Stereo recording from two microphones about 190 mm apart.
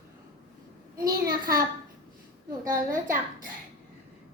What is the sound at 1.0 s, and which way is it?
Speech, 50° right (ahead or behind).